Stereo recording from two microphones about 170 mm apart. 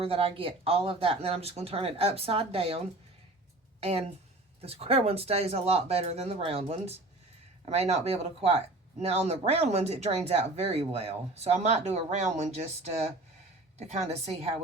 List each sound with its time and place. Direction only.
0.0 s speech: 35° right (ahead or behind)
13.7 s speech: 40° right (ahead or behind)